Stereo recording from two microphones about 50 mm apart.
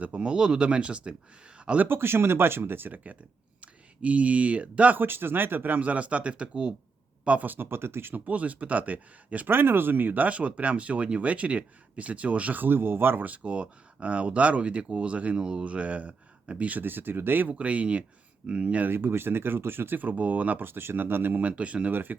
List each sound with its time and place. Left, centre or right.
0.0 s speech: right
1.5 s a sound: right
1.9 s speech: right
3.6 s speech: right
4.9 s speech: right
7.5 s speech: right
8.1 s speech: right
9.5 s speech: right
12.6 s speech: right
13.2 s speech: right
17.5 s speech: right
18.9 s speech: right
20.7 s speech: right
21.4 s speech: right